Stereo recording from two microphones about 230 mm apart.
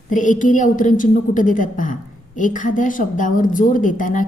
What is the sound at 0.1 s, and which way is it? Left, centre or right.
A woman's voice, left.